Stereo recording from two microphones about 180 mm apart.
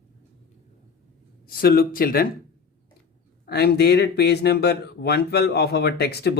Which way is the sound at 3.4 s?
65° left (ahead or behind).